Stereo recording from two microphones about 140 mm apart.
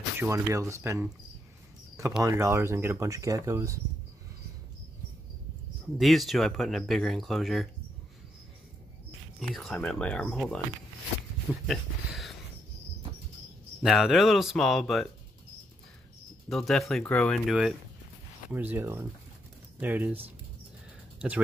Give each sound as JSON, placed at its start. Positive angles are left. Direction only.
{"t": 0.2, "sound": "speech", "side_deg": -20}
{"t": 2.2, "sound": "speech", "side_deg": -20}
{"t": 5.9, "sound": "speech", "side_deg": 0}
{"t": 9.4, "sound": "speech", "side_deg": 5}
{"t": 11.6, "sound": "speech", "side_deg": 0}
{"t": 13.8, "sound": "speech", "side_deg": 0}
{"t": 16.4, "sound": "speech", "side_deg": 0}
{"t": 18.5, "sound": "speech", "side_deg": -15}